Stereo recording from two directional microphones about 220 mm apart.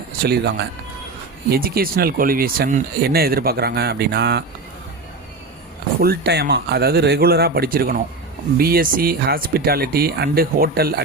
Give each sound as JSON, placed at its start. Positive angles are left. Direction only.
{"t": 0.2, "sound": "speech", "side_deg": -45}
{"t": 6.0, "sound": "speech", "side_deg": -45}